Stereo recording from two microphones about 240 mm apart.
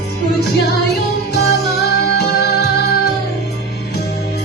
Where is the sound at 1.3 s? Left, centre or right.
Left.